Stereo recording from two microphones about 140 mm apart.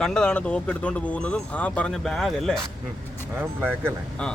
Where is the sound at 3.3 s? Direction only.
15° right (ahead or behind).